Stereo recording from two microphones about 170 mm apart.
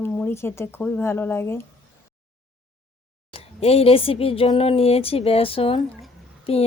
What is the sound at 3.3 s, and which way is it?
Speech, 35° left (ahead or behind).